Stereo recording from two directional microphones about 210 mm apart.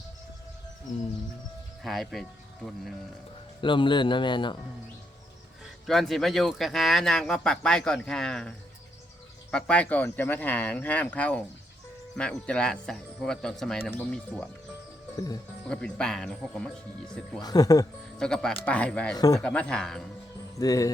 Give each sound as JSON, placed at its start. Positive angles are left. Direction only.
{"t": 1.8, "sound": "speech", "side_deg": 0}
{"t": 3.6, "sound": "speech", "side_deg": 25}
{"t": 5.8, "sound": "speech", "side_deg": 0}
{"t": 12.5, "sound": "speech", "side_deg": 5}
{"t": 15.1, "sound": "speech", "side_deg": 15}
{"t": 15.7, "sound": "speech", "side_deg": 5}
{"t": 17.4, "sound": "speech", "side_deg": 20}
{"t": 18.2, "sound": "speech", "side_deg": 5}
{"t": 19.1, "sound": "speech", "side_deg": 15}
{"t": 19.4, "sound": "speech", "side_deg": 5}
{"t": 20.6, "sound": "speech", "side_deg": 15}